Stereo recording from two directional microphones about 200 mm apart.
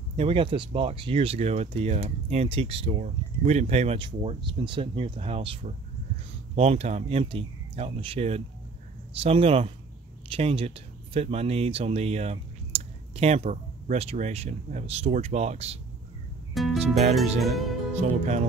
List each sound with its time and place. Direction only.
0.1 s speech: 30° right (ahead or behind)
16.5 s speech: centre (ahead or behind)
17.9 s speech: 35° right (ahead or behind)